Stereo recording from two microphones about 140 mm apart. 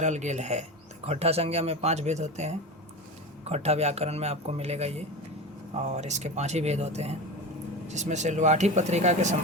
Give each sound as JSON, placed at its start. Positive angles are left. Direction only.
{"t": 0.0, "sound": "speech", "side_deg": -55}